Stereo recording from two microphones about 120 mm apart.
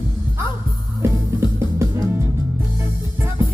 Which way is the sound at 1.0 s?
25° right (ahead or behind).